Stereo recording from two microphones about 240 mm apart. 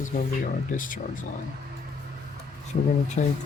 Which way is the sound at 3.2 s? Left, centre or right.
Left.